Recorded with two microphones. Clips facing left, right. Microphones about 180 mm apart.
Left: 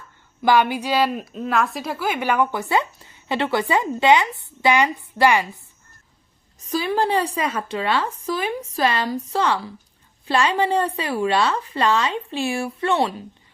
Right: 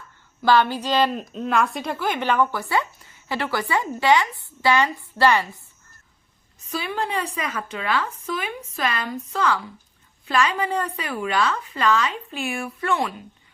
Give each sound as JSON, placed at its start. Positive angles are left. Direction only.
{"t": 0.4, "sound": "a woman's voice", "side_deg": 15}
{"t": 6.6, "sound": "a woman's voice", "side_deg": 35}